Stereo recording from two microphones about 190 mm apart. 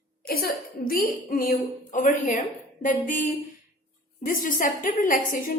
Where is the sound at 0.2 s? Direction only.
50° left (ahead or behind).